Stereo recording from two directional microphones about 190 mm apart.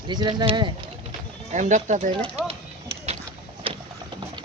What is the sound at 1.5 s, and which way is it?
Speech, 40° right (ahead or behind).